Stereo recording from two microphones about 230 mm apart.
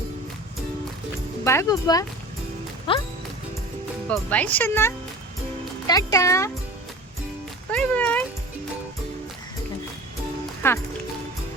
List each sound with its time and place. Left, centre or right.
1.5 s speech: centre
4.1 s speech: centre
7.7 s music: centre
10.6 s speech: centre